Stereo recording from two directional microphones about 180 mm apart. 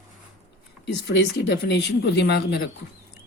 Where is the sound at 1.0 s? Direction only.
70° left (ahead or behind).